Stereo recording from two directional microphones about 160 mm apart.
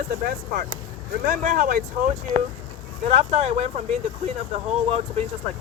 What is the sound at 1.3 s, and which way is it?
Speech, 55° right (ahead or behind).